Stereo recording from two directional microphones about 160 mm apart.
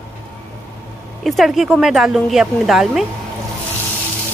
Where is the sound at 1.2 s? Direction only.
Centre (ahead or behind).